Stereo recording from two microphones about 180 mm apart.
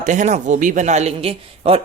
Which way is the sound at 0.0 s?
40° right (ahead or behind).